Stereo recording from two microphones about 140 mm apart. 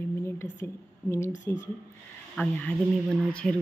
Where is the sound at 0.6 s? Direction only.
15° left (ahead or behind).